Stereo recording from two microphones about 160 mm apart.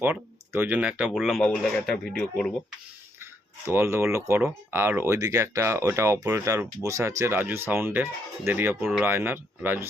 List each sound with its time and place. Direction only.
0.0 s speech: 10° right (ahead or behind); by 2.5 s 5° left (ahead or behind)
3.7 s speech: 15° right (ahead or behind)
8.8 s speech: centre (ahead or behind)
9.0 s speech: 15° right (ahead or behind)